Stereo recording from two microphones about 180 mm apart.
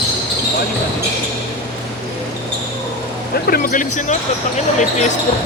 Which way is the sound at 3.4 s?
55° left (ahead or behind).